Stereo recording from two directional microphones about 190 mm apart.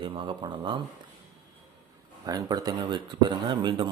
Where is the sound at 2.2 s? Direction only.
20° right (ahead or behind).